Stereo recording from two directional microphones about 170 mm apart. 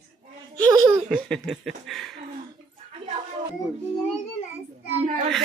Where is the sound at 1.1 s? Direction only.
5° left (ahead or behind).